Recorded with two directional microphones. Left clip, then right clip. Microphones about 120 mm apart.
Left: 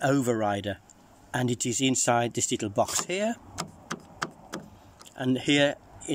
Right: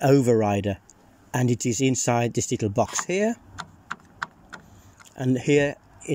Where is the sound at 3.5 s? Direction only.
55° left (ahead or behind).